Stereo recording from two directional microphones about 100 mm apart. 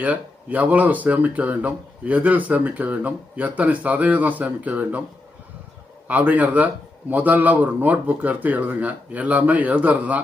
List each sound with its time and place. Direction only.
0.0 s speech: 15° right (ahead or behind)
6.1 s speech: 15° right (ahead or behind)